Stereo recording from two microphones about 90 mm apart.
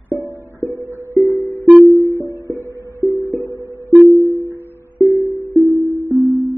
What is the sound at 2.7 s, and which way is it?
Music, 35° right (ahead or behind).